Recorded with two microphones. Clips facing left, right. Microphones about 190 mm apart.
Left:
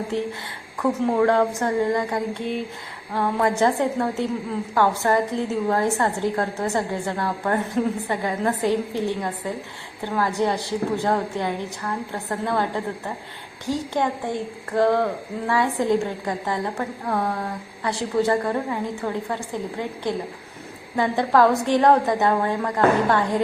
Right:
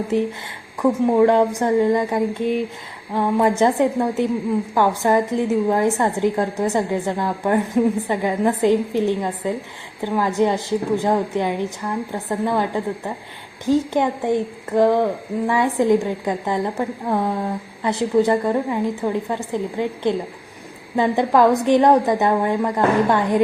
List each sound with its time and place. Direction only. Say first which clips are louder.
0.8 s a woman's voice: right 5 dB; 15° right (ahead or behind)